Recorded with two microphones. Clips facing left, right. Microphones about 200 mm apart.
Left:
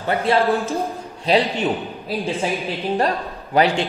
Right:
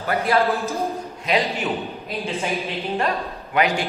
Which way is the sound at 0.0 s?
30° left (ahead or behind).